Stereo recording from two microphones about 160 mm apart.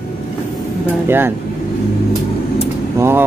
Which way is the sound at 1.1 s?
15° right (ahead or behind).